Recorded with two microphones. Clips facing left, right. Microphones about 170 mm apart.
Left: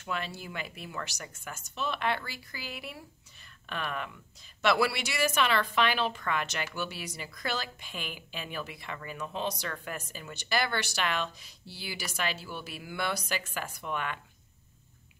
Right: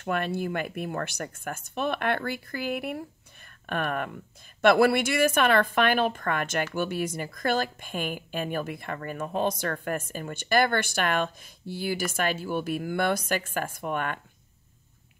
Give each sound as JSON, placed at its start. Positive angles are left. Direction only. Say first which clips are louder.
{"t": 0.0, "sound": "a woman's voice", "louder": "right 9 dB", "side_deg": -55}